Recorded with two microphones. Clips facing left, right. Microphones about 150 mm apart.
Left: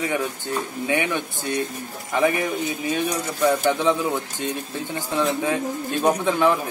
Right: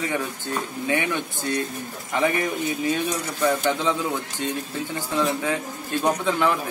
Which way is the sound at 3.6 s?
15° left (ahead or behind).